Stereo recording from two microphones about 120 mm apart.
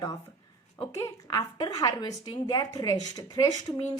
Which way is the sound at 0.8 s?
25° left (ahead or behind).